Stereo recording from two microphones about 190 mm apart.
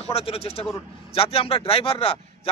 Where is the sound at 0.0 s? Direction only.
30° left (ahead or behind).